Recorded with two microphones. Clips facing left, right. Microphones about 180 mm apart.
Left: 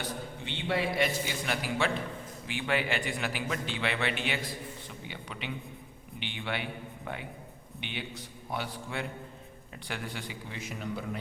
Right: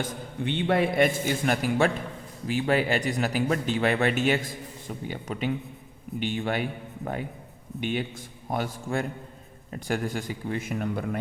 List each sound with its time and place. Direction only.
0.0 s speech: 55° right (ahead or behind)